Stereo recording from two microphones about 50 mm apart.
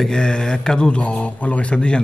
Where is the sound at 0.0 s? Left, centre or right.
Centre.